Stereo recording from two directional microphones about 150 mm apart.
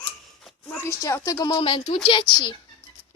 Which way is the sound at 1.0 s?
20° left (ahead or behind).